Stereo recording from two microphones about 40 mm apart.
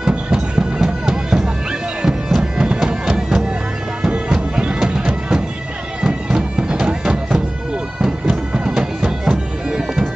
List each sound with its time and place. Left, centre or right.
0.1 s music: right
2.0 s bagpipes: centre
4.0 s music: right
6.0 s bagpipes: centre